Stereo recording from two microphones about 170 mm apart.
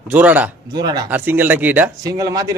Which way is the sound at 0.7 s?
25° right (ahead or behind).